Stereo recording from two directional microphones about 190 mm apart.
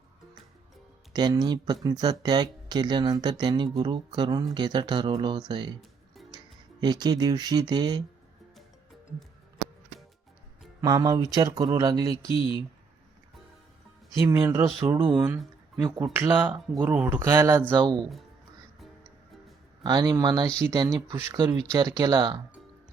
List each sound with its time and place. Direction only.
1.1 s speech: 20° right (ahead or behind)
10.8 s speech: 20° right (ahead or behind)
14.3 s speech: 15° right (ahead or behind)
15.4 s a sound: centre (ahead or behind)
16.1 s speech: 10° right (ahead or behind)
17.7 s speech: 20° right (ahead or behind)
19.8 s speech: 20° right (ahead or behind)